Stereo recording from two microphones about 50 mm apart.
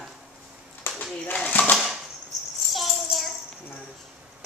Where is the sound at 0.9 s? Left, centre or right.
Left.